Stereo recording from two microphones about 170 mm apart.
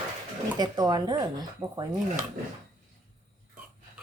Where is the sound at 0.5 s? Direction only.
25° right (ahead or behind).